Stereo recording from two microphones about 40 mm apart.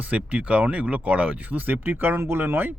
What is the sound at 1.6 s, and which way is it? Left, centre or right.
Speech, right.